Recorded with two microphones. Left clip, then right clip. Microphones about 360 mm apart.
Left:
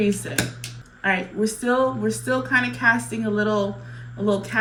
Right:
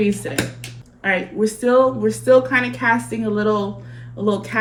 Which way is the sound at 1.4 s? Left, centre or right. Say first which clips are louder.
Right 7 dB; centre.